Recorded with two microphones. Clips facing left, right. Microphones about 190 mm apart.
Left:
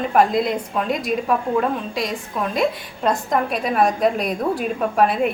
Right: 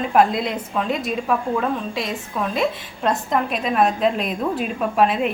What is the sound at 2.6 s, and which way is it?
Speech, centre (ahead or behind).